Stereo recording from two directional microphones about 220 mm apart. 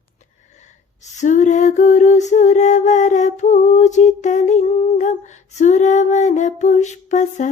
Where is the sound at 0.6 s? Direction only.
30° left (ahead or behind).